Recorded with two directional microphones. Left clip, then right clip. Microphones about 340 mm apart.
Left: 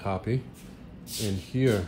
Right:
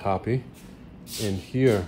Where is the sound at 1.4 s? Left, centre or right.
Centre.